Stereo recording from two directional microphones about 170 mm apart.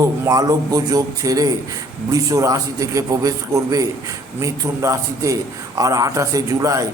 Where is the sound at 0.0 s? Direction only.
20° right (ahead or behind).